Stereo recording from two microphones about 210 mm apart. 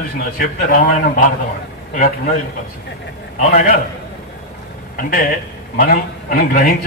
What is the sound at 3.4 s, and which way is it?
Speech, 40° left (ahead or behind).